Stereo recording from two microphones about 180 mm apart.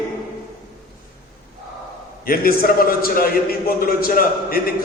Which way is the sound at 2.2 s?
55° left (ahead or behind).